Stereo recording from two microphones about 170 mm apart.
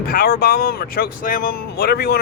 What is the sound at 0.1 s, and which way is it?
Speech, 60° left (ahead or behind).